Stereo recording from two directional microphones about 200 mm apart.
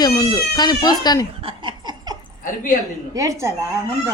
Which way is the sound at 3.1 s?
15° right (ahead or behind).